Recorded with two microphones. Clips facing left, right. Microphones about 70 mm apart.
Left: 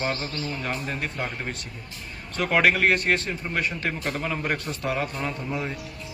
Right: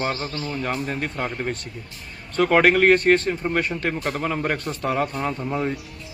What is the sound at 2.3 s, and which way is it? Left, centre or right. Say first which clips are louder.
A man's voice: right 5 dB; right.